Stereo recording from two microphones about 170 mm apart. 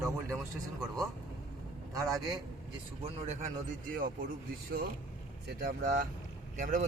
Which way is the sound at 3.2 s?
40° right (ahead or behind).